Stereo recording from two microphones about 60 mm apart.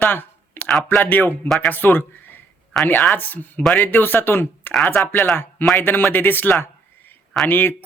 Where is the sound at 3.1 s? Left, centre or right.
Left.